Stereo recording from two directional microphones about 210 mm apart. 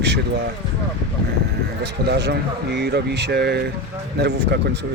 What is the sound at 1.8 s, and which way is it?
Speech, 50° right (ahead or behind).